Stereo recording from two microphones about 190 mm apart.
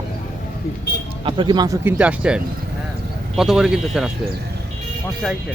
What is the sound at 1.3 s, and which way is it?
Speech, 25° right (ahead or behind).